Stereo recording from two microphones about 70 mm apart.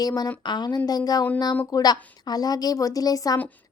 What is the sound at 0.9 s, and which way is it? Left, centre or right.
A woman's voice, left.